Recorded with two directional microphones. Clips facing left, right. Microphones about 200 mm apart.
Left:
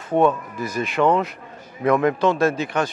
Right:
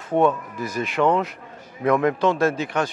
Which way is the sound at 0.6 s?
10° left (ahead or behind).